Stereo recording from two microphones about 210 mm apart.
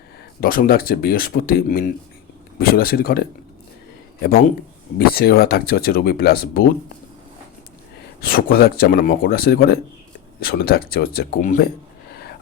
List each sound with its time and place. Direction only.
0.3 s speech: 40° left (ahead or behind)
4.9 s speech: 50° left (ahead or behind)
8.2 s speech: 45° left (ahead or behind)